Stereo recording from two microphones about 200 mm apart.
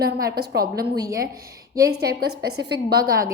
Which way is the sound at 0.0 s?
50° right (ahead or behind).